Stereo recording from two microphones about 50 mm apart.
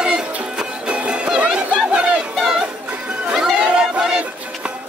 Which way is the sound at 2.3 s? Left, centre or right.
Centre.